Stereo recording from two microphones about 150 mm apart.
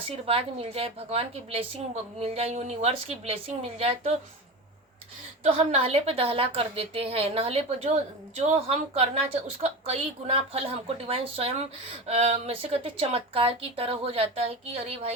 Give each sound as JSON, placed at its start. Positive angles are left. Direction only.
{"t": 0.3, "sound": "a woman's voice", "side_deg": -40}
{"t": 5.4, "sound": "speech", "side_deg": -40}